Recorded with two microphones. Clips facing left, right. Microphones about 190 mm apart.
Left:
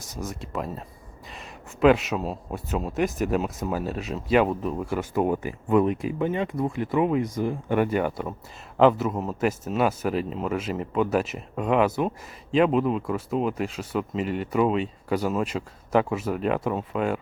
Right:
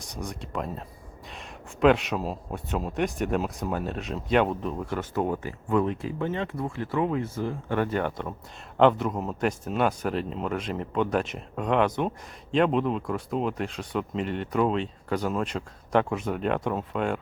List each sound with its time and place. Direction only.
0.0 s speech: 5° left (ahead or behind)